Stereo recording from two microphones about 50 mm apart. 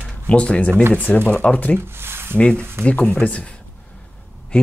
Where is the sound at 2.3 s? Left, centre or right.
Left.